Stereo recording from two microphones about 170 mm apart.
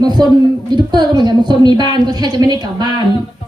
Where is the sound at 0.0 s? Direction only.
25° right (ahead or behind).